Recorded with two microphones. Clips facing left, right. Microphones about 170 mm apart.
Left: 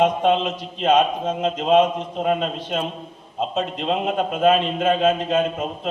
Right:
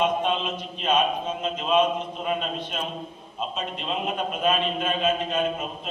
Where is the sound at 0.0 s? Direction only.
90° left.